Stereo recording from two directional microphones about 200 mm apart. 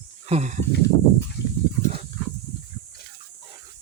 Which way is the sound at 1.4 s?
55° left (ahead or behind).